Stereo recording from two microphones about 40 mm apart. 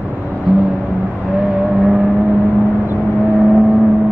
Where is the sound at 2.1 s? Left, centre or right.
Right.